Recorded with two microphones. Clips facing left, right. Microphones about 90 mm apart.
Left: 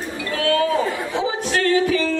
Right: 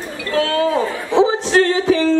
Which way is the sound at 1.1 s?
25° right (ahead or behind).